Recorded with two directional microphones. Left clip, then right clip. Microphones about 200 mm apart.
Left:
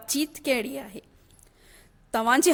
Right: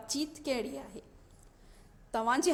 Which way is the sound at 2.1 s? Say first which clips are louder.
Left 8 dB; 45° left (ahead or behind).